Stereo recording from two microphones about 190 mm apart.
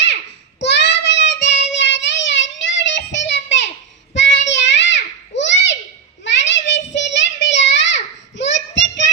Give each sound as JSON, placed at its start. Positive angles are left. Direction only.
{"t": 0.6, "sound": "child singing", "side_deg": 65}